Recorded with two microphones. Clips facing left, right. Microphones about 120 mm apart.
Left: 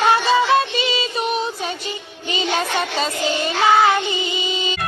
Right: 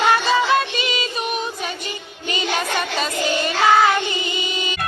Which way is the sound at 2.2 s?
25° left (ahead or behind).